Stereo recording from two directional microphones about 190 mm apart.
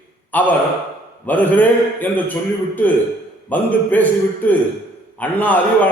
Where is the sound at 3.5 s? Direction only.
10° left (ahead or behind).